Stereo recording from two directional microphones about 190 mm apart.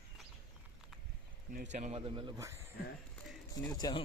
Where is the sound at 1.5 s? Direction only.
40° right (ahead or behind).